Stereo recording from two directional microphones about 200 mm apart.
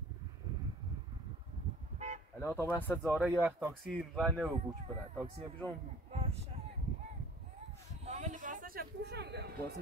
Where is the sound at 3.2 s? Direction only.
5° right (ahead or behind).